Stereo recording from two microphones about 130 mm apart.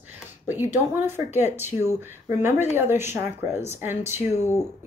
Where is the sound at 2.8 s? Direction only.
20° right (ahead or behind).